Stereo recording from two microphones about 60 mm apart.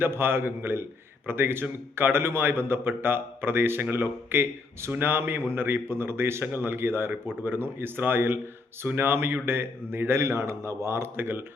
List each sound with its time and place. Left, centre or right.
0.0 s a man's voice: right
10.2 s a man's voice: right